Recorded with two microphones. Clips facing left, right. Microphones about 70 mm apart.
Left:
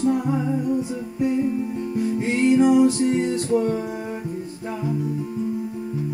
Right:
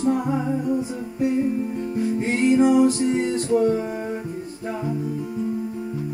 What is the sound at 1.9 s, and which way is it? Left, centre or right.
Music, right.